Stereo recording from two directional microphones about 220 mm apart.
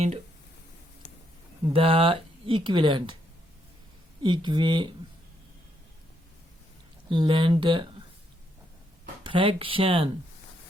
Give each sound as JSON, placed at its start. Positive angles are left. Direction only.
{"t": 1.6, "sound": "speech", "side_deg": -25}
{"t": 4.2, "sound": "speech", "side_deg": -20}
{"t": 7.1, "sound": "speech", "side_deg": -20}
{"t": 9.2, "sound": "speech", "side_deg": -25}